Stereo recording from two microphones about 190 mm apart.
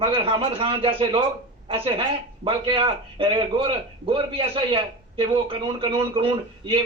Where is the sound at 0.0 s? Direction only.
30° right (ahead or behind).